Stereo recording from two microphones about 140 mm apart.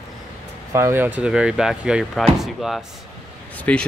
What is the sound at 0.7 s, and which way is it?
Speech, 15° right (ahead or behind).